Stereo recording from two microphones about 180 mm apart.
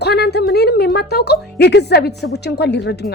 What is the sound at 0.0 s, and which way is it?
A woman's voice, 65° left (ahead or behind).